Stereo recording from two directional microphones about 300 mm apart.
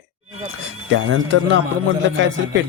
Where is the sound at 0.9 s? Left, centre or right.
Right.